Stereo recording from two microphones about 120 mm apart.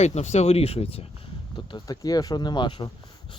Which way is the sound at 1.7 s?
30° left (ahead or behind).